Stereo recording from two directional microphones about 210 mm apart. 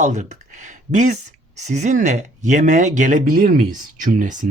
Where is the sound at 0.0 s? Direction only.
35° right (ahead or behind).